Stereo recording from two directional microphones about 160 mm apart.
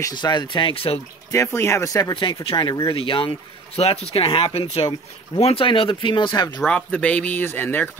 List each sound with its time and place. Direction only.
0.0 s speech: 25° left (ahead or behind)
1.3 s speech: 20° left (ahead or behind)
6.6 s speech: 5° left (ahead or behind)